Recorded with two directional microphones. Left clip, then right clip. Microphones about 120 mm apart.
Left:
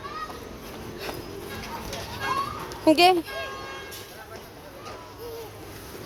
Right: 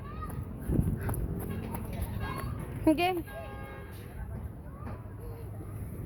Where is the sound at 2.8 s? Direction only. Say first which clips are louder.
Left 10 dB; 20° left (ahead or behind).